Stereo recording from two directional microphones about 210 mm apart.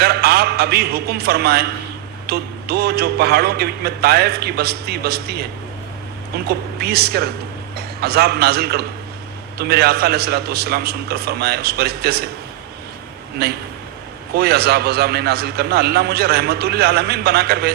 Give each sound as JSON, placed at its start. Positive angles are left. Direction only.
{"t": 0.0, "sound": "a man's voice", "side_deg": -50}
{"t": 6.5, "sound": "a man's voice", "side_deg": -50}
{"t": 13.4, "sound": "a man's voice", "side_deg": -50}